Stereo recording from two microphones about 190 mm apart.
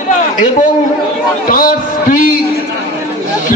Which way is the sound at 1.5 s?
45° left (ahead or behind).